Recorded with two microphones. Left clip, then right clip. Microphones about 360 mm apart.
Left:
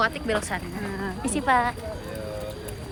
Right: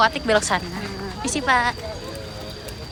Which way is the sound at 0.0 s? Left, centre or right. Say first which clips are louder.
Right 7 dB; centre.